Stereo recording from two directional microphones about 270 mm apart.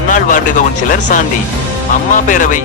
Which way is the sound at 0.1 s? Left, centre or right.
Left.